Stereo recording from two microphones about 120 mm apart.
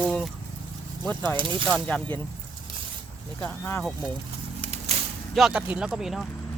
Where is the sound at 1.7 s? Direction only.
5° left (ahead or behind).